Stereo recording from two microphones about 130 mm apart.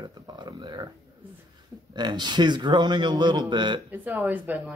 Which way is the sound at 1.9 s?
35° right (ahead or behind).